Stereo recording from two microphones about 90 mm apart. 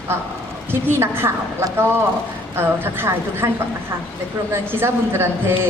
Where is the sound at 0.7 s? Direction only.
25° right (ahead or behind).